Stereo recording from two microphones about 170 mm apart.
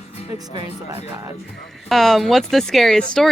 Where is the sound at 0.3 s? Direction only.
20° right (ahead or behind).